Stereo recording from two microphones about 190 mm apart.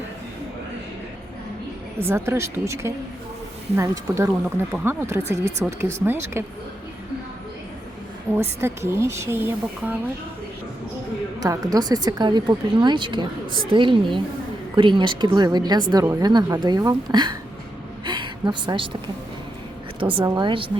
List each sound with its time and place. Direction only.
2.0 s speech: 15° right (ahead or behind)
8.4 s speech: 15° right (ahead or behind)
11.3 s a woman's voice: 20° right (ahead or behind)